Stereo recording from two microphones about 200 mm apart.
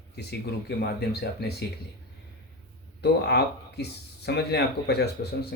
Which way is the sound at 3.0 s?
55° left (ahead or behind).